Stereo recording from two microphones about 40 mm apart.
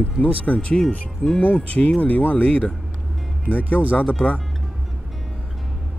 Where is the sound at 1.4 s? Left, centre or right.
Left.